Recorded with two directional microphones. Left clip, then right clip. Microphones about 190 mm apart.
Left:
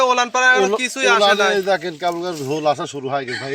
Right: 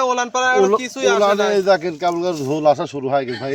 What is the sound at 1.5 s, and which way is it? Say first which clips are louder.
Speech: right 3 dB; 30° right (ahead or behind).